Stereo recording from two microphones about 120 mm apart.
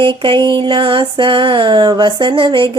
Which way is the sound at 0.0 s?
45° right (ahead or behind).